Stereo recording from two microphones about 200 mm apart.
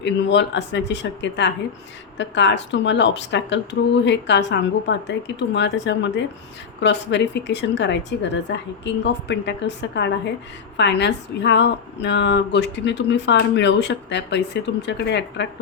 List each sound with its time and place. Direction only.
0.0 s speech: 60° left (ahead or behind)